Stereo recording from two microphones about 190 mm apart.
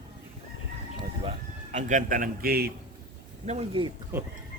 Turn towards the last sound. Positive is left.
turn(degrees=-25)  # may be behind; listen again after turning